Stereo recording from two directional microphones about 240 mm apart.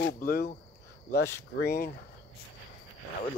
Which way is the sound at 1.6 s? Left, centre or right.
Left.